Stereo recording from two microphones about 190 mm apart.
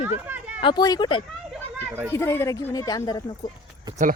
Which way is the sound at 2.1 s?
15° left (ahead or behind).